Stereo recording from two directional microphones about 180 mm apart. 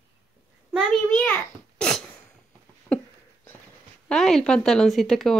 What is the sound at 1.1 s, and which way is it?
Speech, 10° left (ahead or behind).